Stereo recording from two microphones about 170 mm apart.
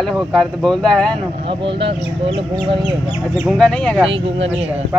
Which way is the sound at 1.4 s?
30° right (ahead or behind).